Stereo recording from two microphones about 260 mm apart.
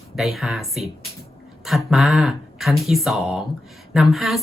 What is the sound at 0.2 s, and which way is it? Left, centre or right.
A woman's voice, centre.